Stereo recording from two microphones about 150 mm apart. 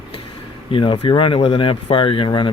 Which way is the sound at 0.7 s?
35° left (ahead or behind).